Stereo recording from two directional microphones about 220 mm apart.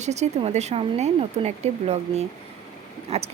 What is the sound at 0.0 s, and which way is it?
Speech, 30° right (ahead or behind).